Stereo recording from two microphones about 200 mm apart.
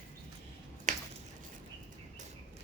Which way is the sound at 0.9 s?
40° right (ahead or behind).